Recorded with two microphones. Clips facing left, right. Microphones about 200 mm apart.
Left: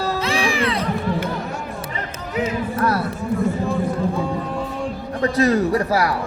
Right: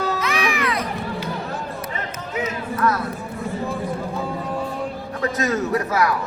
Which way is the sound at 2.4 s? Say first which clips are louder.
Left 2 dB; 35° left (ahead or behind).